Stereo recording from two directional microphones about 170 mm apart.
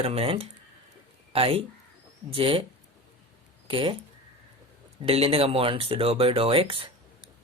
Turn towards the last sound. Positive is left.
turn(degrees=-30)  # may be behind; listen again after turning